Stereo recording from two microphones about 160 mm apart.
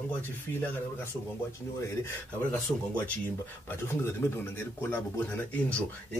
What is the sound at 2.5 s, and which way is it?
Speech, 10° left (ahead or behind).